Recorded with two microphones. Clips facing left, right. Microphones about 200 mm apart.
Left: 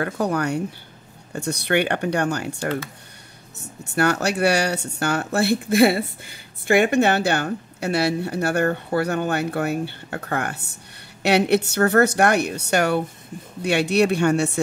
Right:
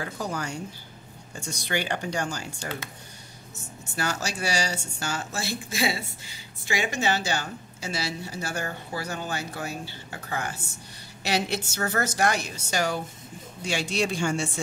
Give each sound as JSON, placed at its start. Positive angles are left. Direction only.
{"t": 0.0, "sound": "speech", "side_deg": 65}